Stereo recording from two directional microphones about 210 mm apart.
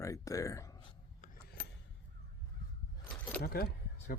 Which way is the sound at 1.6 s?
60° left (ahead or behind).